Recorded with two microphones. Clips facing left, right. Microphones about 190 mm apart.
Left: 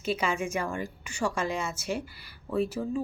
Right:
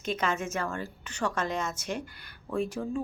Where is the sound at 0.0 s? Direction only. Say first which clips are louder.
Left 1 dB; 10° left (ahead or behind).